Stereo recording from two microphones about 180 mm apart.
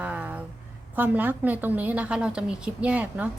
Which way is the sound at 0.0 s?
5° right (ahead or behind).